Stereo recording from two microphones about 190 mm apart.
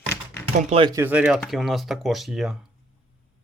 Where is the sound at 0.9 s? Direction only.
10° right (ahead or behind).